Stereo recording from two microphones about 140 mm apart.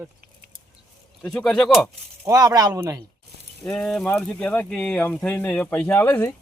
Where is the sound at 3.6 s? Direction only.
5° left (ahead or behind).